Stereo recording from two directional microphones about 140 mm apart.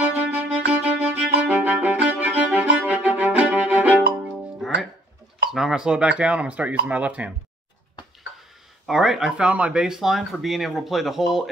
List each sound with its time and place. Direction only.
0.0 s violin: 10° right (ahead or behind)
4.6 s music: centre (ahead or behind)
5.5 s speech: 5° right (ahead or behind)
8.8 s speech: 5° right (ahead or behind)